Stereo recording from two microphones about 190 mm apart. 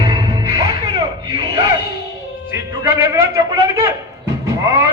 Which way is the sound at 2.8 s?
15° right (ahead or behind).